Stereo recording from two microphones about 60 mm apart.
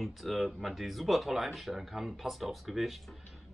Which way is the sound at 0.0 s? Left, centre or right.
Centre.